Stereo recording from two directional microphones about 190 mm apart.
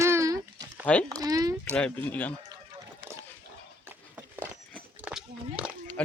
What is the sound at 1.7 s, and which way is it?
Speech, 5° left (ahead or behind).